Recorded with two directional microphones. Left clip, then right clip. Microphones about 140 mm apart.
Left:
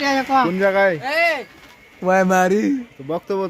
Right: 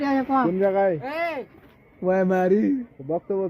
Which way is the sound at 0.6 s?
30° left (ahead or behind).